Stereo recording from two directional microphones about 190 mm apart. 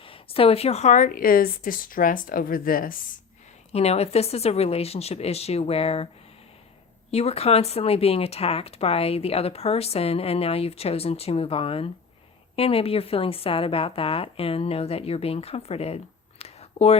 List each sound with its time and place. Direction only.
0.0 s a woman's voice: 30° left (ahead or behind); by 3.0 s 50° left (ahead or behind)
3.7 s speech: 35° left (ahead or behind)
7.1 s speech: 35° left (ahead or behind)
16.4 s a sound: 35° left (ahead or behind)